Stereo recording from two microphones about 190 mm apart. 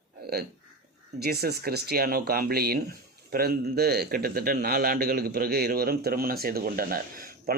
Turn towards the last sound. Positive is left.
turn(degrees=-50)  # may be behind; listen again after turning